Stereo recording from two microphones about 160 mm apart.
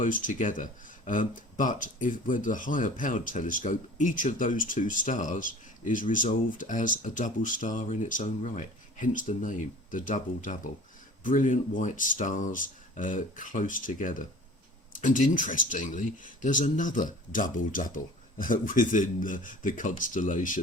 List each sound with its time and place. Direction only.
0.0 s speech: 55° left (ahead or behind)